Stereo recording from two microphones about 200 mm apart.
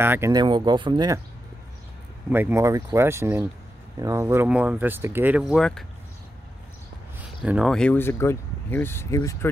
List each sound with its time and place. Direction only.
0.0 s speech: 10° right (ahead or behind)
2.2 s speech: 10° right (ahead or behind)
7.4 s speech: 5° right (ahead or behind); by 9.5 s 15° left (ahead or behind)